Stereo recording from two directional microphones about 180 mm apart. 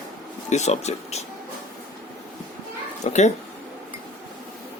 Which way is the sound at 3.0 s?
40° left (ahead or behind).